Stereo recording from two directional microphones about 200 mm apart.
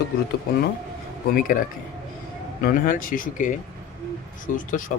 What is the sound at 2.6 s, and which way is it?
Speech, 45° left (ahead or behind).